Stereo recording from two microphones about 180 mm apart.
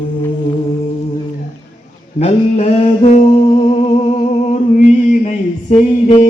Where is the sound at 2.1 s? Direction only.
35° left (ahead or behind).